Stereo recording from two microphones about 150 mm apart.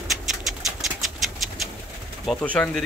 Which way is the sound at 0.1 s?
Centre (ahead or behind).